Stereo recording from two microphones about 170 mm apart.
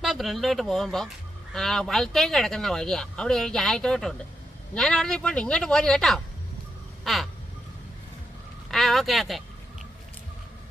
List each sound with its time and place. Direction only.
0.0 s speech: centre (ahead or behind)
8.6 s vehicle: centre (ahead or behind)